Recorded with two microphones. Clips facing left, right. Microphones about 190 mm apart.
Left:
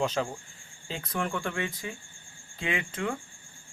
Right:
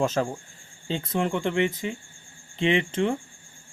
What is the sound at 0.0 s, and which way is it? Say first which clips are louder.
Speech: right 4 dB; 45° right (ahead or behind).